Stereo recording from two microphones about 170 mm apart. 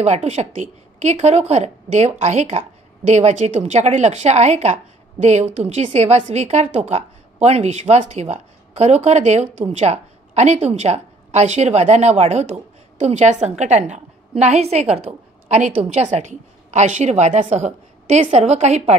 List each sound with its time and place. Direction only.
0.0 s a woman's voice: 40° right (ahead or behind)